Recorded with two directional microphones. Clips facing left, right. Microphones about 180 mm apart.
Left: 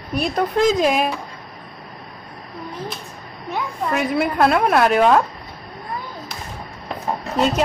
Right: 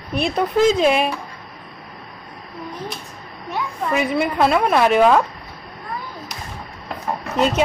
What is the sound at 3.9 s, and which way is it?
Speech, centre (ahead or behind).